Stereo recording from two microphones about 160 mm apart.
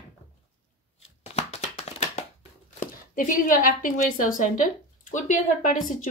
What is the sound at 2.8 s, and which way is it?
Speech, 55° left (ahead or behind).